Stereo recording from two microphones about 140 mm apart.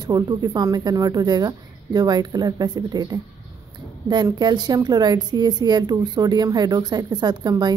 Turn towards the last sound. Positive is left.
turn(degrees=-30)  # may be behind; listen again after turning